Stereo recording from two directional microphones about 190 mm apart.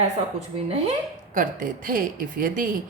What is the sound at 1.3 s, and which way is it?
A woman's voice, 45° right (ahead or behind).